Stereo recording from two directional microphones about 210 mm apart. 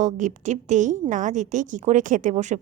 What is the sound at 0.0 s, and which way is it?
A woman's voice, 35° right (ahead or behind).